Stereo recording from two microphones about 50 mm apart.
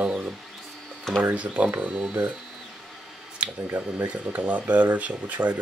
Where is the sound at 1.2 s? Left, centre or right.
Right.